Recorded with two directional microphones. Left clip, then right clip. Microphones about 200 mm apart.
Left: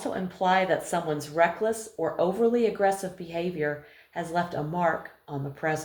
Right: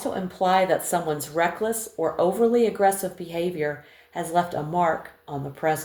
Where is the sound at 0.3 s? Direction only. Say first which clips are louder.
Right 3 dB; 40° right (ahead or behind).